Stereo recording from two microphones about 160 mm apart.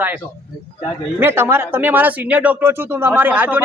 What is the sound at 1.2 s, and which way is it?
Speech, 15° right (ahead or behind).